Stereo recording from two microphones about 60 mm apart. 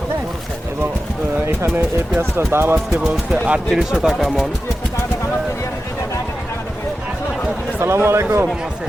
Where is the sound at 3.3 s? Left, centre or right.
Centre.